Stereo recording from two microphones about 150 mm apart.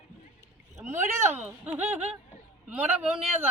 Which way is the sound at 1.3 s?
10° right (ahead or behind).